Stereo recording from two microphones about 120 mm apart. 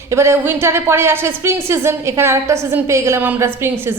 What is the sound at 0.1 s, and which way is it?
A woman's voice, 20° right (ahead or behind).